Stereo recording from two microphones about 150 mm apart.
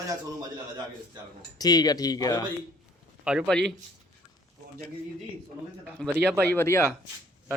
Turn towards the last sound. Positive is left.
turn(degrees=20)  # may be behind; listen again after turning